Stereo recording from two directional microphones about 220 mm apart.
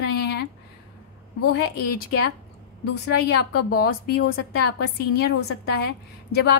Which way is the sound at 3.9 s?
55° left (ahead or behind).